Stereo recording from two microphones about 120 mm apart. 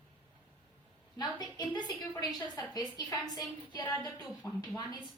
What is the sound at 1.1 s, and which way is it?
A woman's voice, 35° left (ahead or behind).